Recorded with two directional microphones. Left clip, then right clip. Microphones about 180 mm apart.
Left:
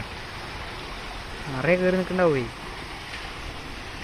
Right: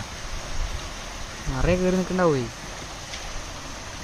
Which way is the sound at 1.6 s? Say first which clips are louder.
Left 2 dB; 45° right (ahead or behind).